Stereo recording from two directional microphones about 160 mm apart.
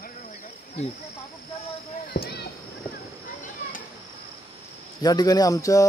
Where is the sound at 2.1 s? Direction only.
90° left.